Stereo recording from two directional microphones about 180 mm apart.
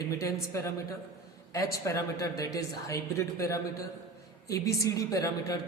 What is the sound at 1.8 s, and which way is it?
A woman's voice, 15° left (ahead or behind).